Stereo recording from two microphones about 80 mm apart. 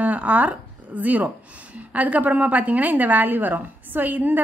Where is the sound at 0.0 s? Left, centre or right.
Centre.